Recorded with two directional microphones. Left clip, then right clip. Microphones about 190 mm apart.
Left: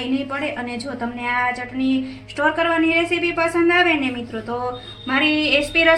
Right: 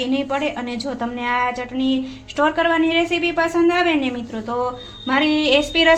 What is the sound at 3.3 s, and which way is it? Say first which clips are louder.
A woman's voice: left 1 dB; 50° right (ahead or behind).